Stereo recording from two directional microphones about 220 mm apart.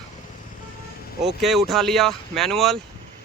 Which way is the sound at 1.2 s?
Centre (ahead or behind).